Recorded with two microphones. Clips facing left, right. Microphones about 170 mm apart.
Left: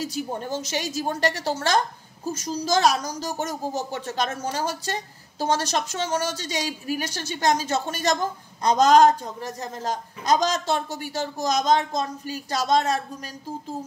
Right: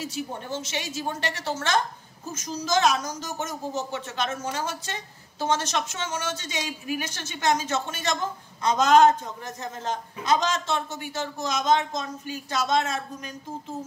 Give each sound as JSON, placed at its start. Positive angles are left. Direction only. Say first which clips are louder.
{"t": 0.0, "sound": "a woman's voice", "louder": "left 4 dB", "side_deg": 40}